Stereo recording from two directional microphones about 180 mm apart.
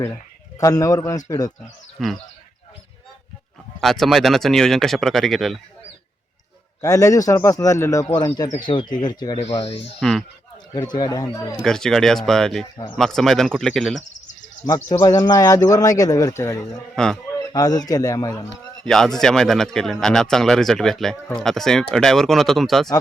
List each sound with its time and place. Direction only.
0.6 s speech: 20° left (ahead or behind)
2.0 s speech: centre (ahead or behind)
3.8 s speech: centre (ahead or behind)
6.8 s speech: 20° left (ahead or behind)
9.4 s speech: 35° left (ahead or behind)
10.0 s speech: centre (ahead or behind)
10.8 s speech: 25° left (ahead or behind)
11.6 s speech: 5° left (ahead or behind)
14.7 s speech: 20° left (ahead or behind)
16.9 s speech: centre (ahead or behind)
17.5 s speech: 20° left (ahead or behind)
18.8 s speech: centre (ahead or behind)